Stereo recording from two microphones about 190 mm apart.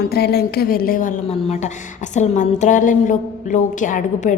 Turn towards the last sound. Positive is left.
turn(degrees=40)  # may be behind; listen again after turning